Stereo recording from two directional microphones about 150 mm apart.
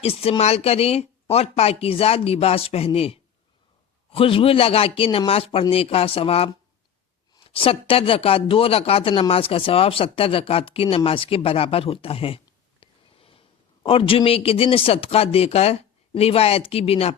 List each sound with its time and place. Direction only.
0.0 s speech: 40° left (ahead or behind)
12.8 s a sound: 40° left (ahead or behind)
13.8 s speech: 35° left (ahead or behind)